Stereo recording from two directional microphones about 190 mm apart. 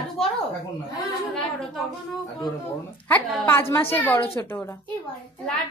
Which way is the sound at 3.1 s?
10° left (ahead or behind).